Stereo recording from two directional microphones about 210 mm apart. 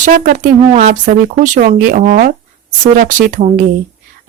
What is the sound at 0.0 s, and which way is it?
Speech, 40° right (ahead or behind).